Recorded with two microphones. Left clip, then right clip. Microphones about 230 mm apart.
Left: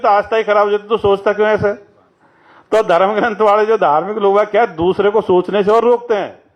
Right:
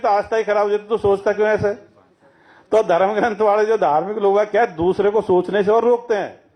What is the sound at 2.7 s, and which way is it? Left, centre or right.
A man's voice, left.